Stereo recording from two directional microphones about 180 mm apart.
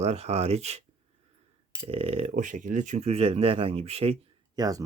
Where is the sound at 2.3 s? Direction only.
45° right (ahead or behind).